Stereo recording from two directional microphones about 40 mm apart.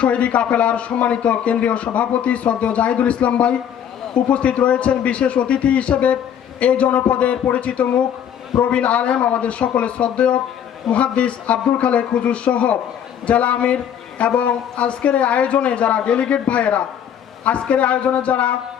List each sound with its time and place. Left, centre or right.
0.0 s speech: left